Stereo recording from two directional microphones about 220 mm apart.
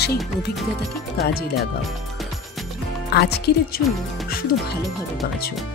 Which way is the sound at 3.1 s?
45° left (ahead or behind).